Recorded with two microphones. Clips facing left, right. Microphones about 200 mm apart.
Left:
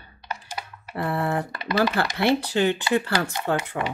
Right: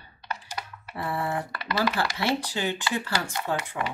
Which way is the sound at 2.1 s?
60° left (ahead or behind).